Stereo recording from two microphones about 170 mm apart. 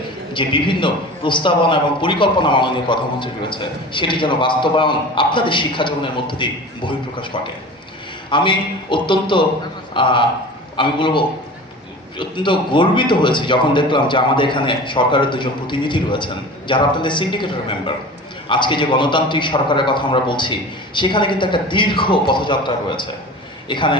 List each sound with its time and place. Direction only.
0.3 s a man's voice: 30° left (ahead or behind)